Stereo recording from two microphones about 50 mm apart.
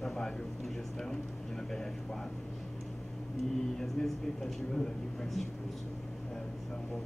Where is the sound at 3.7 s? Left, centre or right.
Centre.